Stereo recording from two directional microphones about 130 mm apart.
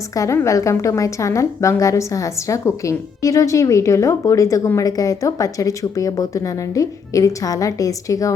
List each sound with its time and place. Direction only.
0.1 s a woman's voice: 25° left (ahead or behind)